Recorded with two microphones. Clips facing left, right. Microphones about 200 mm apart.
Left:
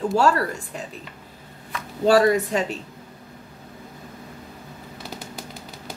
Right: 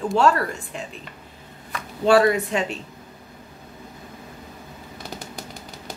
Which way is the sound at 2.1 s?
35° left (ahead or behind).